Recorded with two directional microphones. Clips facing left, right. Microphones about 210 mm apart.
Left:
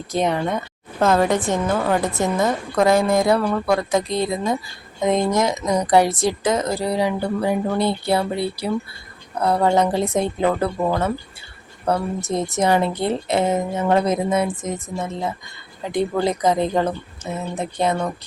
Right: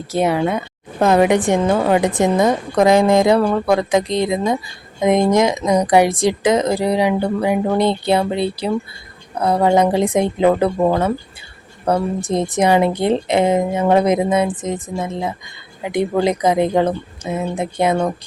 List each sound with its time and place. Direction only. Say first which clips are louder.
0.1 s a woman's voice: right 4 dB; 10° right (ahead or behind)
11.9 s a woman's voice: right 4 dB; 15° right (ahead or behind)